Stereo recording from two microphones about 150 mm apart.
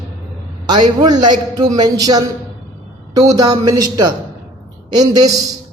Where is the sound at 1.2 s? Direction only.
25° right (ahead or behind).